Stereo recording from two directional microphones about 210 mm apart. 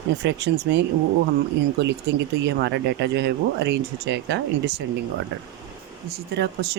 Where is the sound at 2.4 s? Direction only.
55° right (ahead or behind).